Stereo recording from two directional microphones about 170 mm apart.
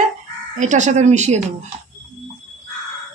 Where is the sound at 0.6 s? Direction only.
45° right (ahead or behind).